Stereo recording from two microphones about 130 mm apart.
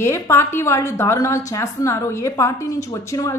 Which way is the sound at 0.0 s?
20° left (ahead or behind).